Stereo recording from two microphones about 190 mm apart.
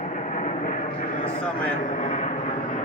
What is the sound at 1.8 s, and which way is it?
Speech, 40° left (ahead or behind).